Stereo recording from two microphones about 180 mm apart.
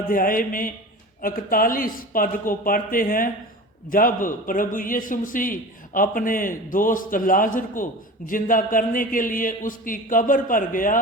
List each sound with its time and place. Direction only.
0.1 s a man's voice: 50° left (ahead or behind)